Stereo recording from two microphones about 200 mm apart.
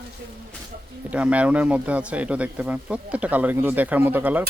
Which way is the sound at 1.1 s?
5° right (ahead or behind).